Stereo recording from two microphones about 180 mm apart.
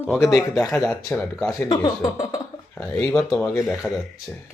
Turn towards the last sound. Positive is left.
turn(degrees=0)  # may be behind; listen again after turning